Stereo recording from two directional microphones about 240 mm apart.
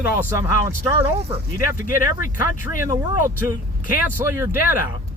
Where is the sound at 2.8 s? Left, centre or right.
Centre.